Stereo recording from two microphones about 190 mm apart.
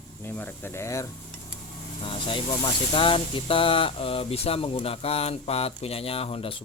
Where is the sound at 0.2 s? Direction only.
10° left (ahead or behind).